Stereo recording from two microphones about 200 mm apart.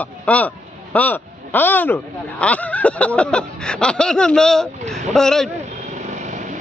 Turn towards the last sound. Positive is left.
turn(degrees=0)  # may be behind; listen again after turning